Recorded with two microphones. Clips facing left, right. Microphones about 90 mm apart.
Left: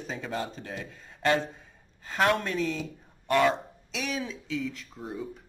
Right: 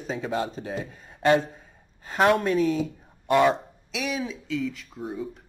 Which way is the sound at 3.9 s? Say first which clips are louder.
Right 3 dB; 5° right (ahead or behind).